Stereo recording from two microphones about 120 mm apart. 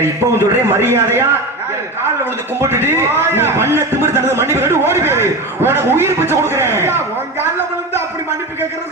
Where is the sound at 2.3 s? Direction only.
20° right (ahead or behind).